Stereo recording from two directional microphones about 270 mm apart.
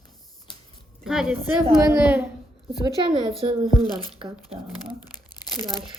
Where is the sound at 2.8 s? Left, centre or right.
Centre.